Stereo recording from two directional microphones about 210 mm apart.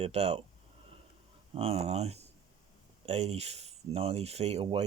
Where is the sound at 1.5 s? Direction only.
30° right (ahead or behind).